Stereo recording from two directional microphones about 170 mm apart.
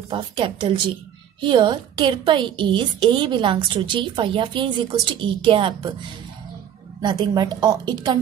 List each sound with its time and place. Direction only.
0.1 s a woman's voice: 30° right (ahead or behind)
7.0 s a woman's voice: 25° right (ahead or behind)